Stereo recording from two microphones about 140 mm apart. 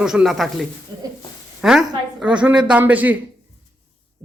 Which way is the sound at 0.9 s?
30° right (ahead or behind).